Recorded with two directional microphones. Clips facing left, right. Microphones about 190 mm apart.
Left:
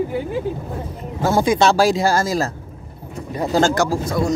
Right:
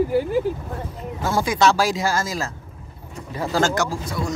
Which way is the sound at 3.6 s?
35° left (ahead or behind).